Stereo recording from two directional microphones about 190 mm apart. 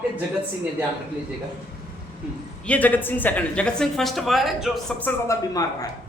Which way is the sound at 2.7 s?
10° left (ahead or behind).